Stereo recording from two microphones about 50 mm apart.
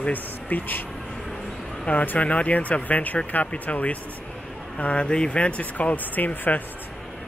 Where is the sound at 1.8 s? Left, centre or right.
Left.